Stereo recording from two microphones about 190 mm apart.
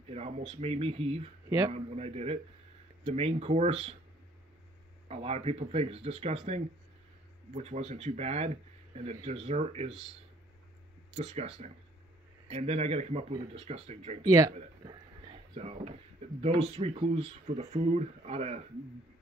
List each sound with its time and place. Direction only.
0.1 s speech: 35° right (ahead or behind)
5.0 s speech: 35° right (ahead or behind)
11.1 s speech: 35° right (ahead or behind)
14.9 s whispering: 30° right (ahead or behind)
16.3 s speech: 35° right (ahead or behind)